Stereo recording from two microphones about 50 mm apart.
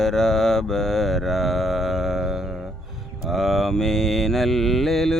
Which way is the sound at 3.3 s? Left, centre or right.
Centre.